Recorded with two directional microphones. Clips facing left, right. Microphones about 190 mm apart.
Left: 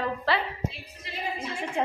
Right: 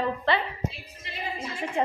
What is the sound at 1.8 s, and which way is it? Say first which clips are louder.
Speech: right 2 dB; centre (ahead or behind).